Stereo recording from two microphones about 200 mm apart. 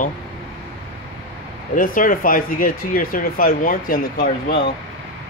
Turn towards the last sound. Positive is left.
turn(degrees=50)  # may be behind; listen again after turning